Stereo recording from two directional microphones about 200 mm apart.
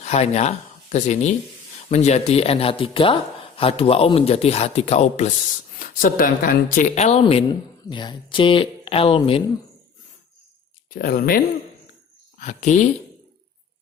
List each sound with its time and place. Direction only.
0.0 s a man's voice: 35° left (ahead or behind)
5.8 s speech: 45° left (ahead or behind); by 9.4 s 25° left (ahead or behind)
10.9 s speech: 45° left (ahead or behind)
12.4 s a man's voice: 35° left (ahead or behind)